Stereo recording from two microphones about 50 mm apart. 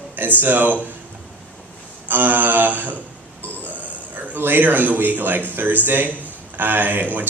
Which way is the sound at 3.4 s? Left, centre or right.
Right.